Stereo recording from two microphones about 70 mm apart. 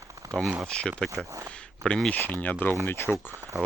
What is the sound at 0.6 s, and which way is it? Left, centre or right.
Speech, centre.